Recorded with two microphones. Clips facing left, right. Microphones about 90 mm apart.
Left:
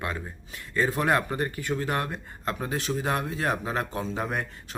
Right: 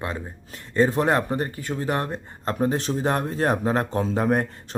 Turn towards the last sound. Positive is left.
turn(degrees=-45)  # may be behind; listen again after turning